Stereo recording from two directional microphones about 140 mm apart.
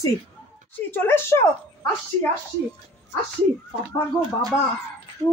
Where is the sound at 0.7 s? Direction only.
15° left (ahead or behind).